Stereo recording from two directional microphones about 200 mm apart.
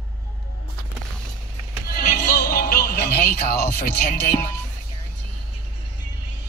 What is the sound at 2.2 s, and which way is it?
Music, 50° left (ahead or behind).